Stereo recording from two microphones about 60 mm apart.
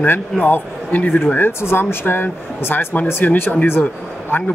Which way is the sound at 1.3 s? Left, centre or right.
Left.